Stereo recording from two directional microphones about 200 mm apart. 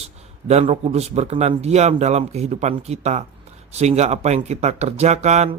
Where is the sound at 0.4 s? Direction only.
30° right (ahead or behind).